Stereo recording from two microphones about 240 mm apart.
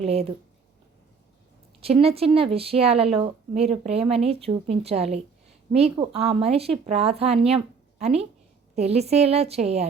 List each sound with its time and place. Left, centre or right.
0.0 s speech: right
1.8 s speech: right